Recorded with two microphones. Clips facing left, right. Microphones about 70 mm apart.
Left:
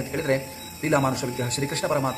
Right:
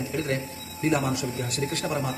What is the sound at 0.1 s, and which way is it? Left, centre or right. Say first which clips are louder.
Speech: left 4 dB; left.